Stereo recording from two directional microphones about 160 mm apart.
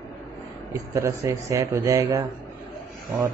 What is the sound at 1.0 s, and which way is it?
Speech, 20° right (ahead or behind).